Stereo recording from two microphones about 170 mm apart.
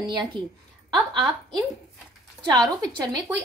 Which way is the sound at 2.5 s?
20° right (ahead or behind).